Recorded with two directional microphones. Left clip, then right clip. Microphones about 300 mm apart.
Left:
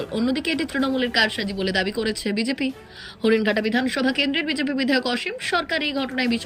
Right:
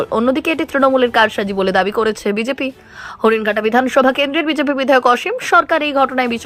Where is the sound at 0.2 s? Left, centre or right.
Centre.